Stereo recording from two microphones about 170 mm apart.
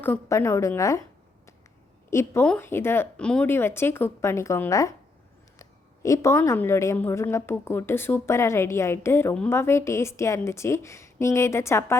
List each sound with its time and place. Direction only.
0.0 s a woman's voice: 15° left (ahead or behind)
2.0 s a woman's voice: 15° left (ahead or behind)